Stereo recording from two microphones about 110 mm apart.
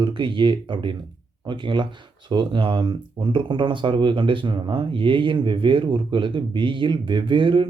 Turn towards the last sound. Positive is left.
turn(degrees=-50)  # may be behind; listen again after turning